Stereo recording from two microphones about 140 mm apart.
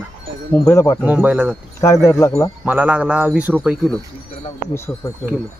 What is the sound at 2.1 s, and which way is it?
Speech, 25° left (ahead or behind).